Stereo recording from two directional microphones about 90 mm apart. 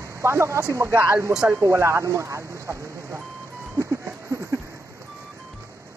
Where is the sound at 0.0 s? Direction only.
35° right (ahead or behind).